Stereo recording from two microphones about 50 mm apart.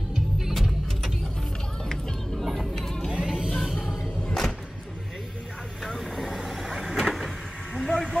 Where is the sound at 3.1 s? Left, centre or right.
Centre.